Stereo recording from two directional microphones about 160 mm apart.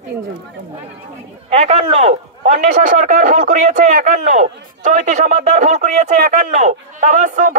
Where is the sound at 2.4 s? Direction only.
55° right (ahead or behind).